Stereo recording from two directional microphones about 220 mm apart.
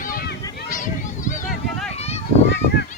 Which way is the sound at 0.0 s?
40° left (ahead or behind).